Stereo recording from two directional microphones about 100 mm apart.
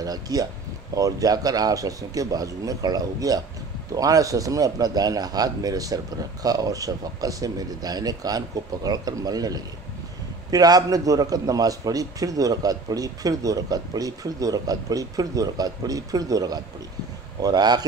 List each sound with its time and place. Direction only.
0.0 s a man's voice: 40° right (ahead or behind)